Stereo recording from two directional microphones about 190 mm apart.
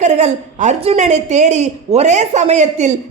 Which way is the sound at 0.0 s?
35° right (ahead or behind).